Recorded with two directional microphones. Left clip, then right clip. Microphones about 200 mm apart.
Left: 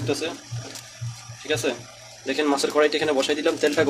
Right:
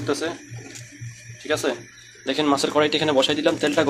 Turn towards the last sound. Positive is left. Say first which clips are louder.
# right 1 dB
turn(degrees=-10)  # may be behind; listen again after turning